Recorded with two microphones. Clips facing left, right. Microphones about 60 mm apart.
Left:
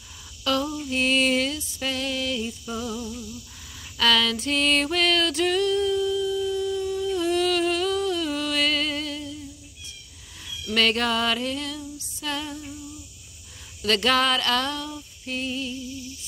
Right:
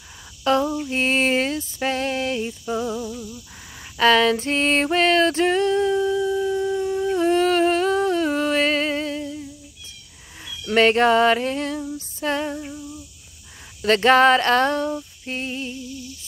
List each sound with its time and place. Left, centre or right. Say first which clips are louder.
0.4 s a sound: right 6 dB; right
4.0 s music: right 6 dB; right
10.7 s female singing: right 7 dB; right
13.8 s female singing: right 7 dB; right